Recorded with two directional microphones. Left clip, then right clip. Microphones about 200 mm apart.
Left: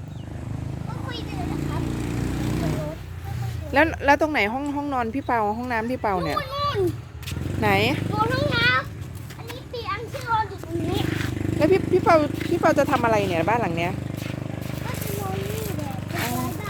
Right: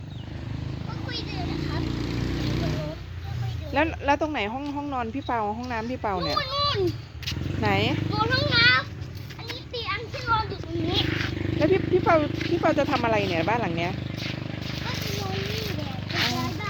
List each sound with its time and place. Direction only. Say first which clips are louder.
3.7 s speech: left 5 dB; 20° left (ahead or behind)
9.5 s children playing: even; 10° left (ahead or behind)
10.9 s speech: right 1 dB; 5° left (ahead or behind)
14.8 s a sound: right 1 dB; 10° left (ahead or behind)
16.1 s vehicle: right 2 dB; 10° left (ahead or behind)